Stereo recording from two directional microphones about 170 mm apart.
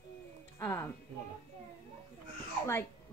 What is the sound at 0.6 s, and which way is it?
Speech, 15° left (ahead or behind).